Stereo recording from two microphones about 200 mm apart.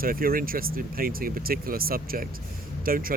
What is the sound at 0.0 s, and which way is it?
Speech, 45° right (ahead or behind).